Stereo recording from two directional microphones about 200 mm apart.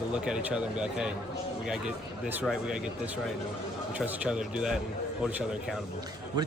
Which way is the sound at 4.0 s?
5° right (ahead or behind).